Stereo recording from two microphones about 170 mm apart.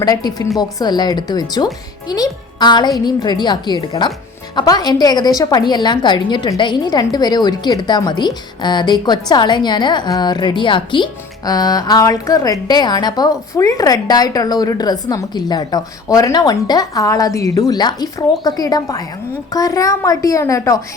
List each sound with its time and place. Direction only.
0.0 s a woman's voice: 25° left (ahead or behind)